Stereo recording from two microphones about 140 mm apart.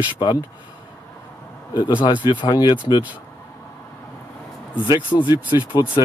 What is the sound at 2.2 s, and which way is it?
Speech, 30° left (ahead or behind).